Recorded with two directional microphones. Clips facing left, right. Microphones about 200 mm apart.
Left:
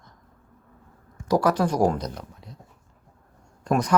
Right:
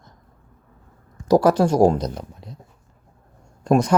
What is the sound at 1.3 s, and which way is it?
Speech, 30° right (ahead or behind).